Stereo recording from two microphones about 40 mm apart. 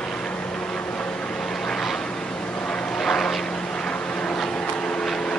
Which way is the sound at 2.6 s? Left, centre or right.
Centre.